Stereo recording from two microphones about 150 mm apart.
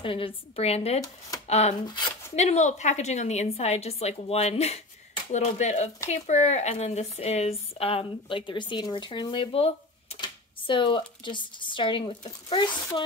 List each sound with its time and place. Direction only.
0.0 s a woman's voice: 35° left (ahead or behind)